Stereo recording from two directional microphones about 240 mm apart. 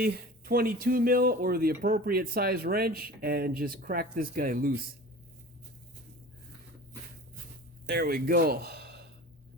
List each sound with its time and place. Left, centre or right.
0.0 s speech: right
7.9 s speech: right